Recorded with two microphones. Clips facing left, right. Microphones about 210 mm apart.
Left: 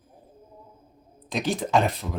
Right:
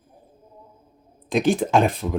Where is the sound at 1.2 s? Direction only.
50° right (ahead or behind).